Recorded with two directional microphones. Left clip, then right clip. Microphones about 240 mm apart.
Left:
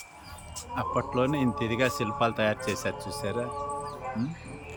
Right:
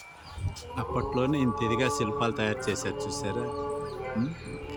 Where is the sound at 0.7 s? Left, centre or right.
Centre.